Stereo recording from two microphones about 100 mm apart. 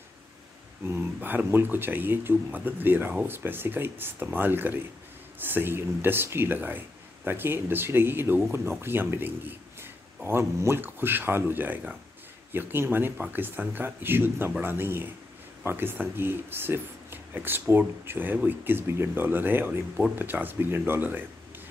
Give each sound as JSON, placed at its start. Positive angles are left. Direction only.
{"t": 0.8, "sound": "speech", "side_deg": -25}